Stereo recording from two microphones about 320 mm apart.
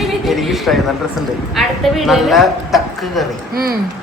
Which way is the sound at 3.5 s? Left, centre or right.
Right.